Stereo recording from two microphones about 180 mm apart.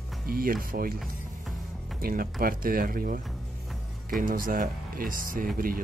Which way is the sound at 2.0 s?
55° right (ahead or behind).